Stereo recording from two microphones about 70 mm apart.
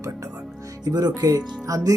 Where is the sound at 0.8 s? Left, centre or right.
Right.